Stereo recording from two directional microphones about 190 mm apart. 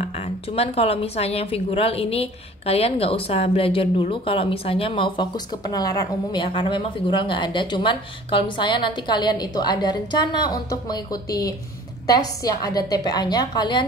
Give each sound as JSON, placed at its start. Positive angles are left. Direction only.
{"t": 0.0, "sound": "a woman's voice", "side_deg": 35}